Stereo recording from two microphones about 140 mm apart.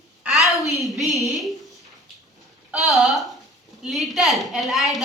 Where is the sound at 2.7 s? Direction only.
Centre (ahead or behind).